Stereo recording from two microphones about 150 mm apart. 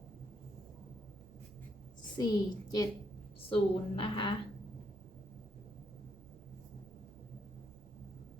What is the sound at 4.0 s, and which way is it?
Speech, 35° left (ahead or behind).